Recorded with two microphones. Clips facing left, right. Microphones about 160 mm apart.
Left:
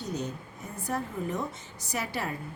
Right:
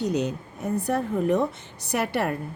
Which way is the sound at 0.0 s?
70° right (ahead or behind).